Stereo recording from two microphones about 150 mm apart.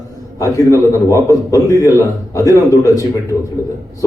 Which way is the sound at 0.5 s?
20° left (ahead or behind).